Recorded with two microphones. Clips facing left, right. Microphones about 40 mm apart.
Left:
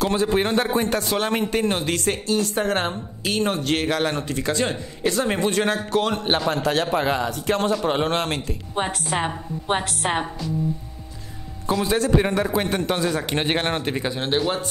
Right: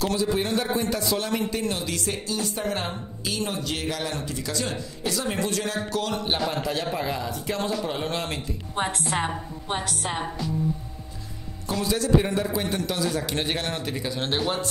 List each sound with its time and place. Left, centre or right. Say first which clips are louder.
0.1 s a man's voice: left 4 dB; left
6.5 s a man's voice: left 6 dB; left
8.7 s a woman's voice: left 2 dB; centre
9.7 s a man's voice: left 6 dB; left
11.8 s a man's voice: left 2 dB; left
14.1 s a woman's voice: left 3 dB; centre